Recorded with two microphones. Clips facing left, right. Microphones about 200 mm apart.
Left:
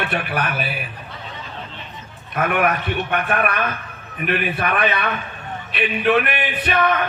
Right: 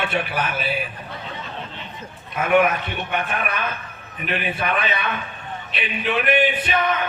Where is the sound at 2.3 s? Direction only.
55° left (ahead or behind).